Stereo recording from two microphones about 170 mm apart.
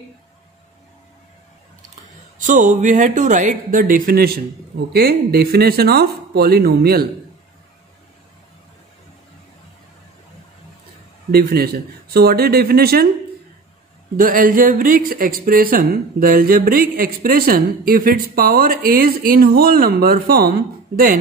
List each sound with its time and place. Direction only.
2.3 s speech: 50° right (ahead or behind); by 7.1 s 65° right (ahead or behind)
11.3 s speech: 65° right (ahead or behind)
14.1 s speech: 55° right (ahead or behind)